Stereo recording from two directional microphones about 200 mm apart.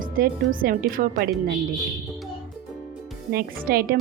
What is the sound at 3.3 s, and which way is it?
Speech, 50° right (ahead or behind).